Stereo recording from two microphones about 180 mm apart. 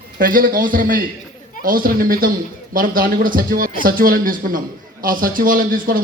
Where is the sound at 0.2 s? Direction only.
50° right (ahead or behind).